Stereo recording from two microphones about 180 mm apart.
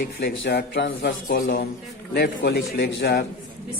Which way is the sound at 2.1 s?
70° left (ahead or behind).